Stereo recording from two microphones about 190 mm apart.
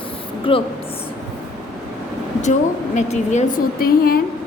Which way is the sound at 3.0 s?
40° left (ahead or behind).